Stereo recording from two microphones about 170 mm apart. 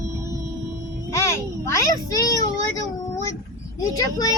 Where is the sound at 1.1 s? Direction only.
15° left (ahead or behind).